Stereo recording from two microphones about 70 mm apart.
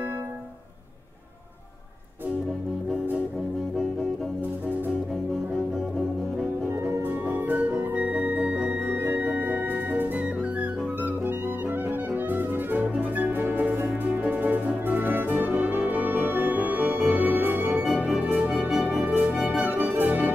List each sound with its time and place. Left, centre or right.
7.3 s music: right
8.7 s music: right
9.2 s music: right
17.1 s organ: right
17.8 s music: centre
19.7 s music: right